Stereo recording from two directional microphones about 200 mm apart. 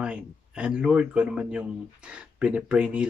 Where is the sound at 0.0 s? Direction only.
5° right (ahead or behind).